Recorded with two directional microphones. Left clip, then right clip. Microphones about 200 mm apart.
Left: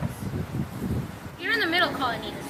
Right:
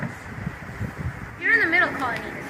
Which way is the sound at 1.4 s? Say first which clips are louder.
Right 5 dB; 5° left (ahead or behind).